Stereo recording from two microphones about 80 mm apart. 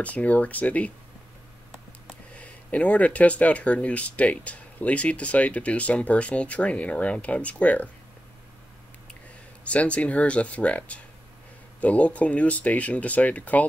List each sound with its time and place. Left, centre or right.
0.0 s speech: centre
2.3 s speech: centre
9.7 s speech: centre